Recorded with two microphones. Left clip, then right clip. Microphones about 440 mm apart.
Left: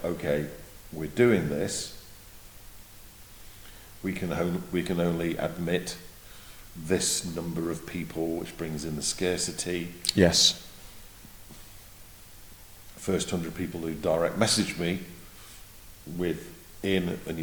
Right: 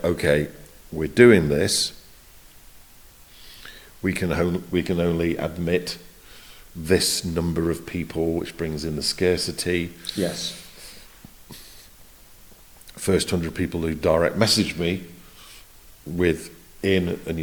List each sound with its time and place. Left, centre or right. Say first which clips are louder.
0.0 s speech: right 8 dB; right
4.0 s speech: right 7 dB; right
10.0 s speech: left 6 dB; left
13.0 s speech: right 7 dB; right
16.8 s speech: right 6 dB; right